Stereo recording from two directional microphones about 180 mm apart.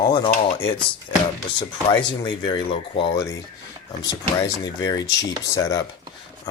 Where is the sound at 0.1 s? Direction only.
25° left (ahead or behind).